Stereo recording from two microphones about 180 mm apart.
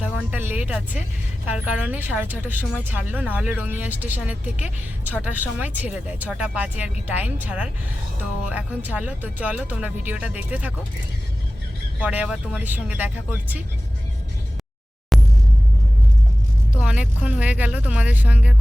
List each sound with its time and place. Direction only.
0.0 s a woman's voice: 10° right (ahead or behind)
11.9 s a woman's voice: 10° right (ahead or behind)
15.1 s a sound: centre (ahead or behind)
16.8 s a woman's voice: 5° right (ahead or behind)